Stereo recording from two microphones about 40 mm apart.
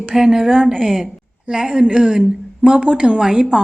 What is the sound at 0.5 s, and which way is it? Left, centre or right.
Speech, centre.